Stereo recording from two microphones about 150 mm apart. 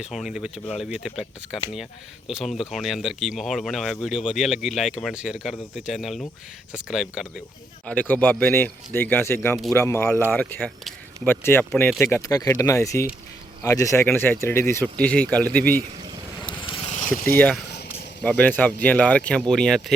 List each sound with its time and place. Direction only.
0.0 s speech: 5° right (ahead or behind)
7.9 s speech: 10° left (ahead or behind)
16.6 s vehicle: 35° left (ahead or behind)
17.2 s speech: 10° left (ahead or behind)